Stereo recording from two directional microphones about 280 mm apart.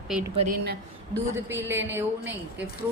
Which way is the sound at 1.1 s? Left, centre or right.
Centre.